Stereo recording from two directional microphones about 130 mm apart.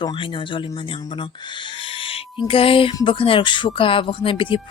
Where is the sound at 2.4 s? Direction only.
45° left (ahead or behind).